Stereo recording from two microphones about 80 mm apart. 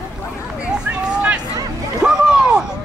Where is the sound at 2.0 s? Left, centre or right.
Centre.